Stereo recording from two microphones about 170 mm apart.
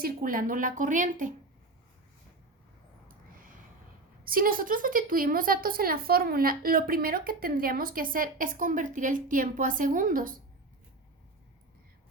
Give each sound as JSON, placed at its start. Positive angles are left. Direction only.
{"t": 0.0, "sound": "a woman's voice", "side_deg": -60}
{"t": 4.2, "sound": "a woman's voice", "side_deg": -60}